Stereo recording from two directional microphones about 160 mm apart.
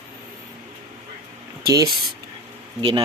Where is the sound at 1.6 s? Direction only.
25° right (ahead or behind).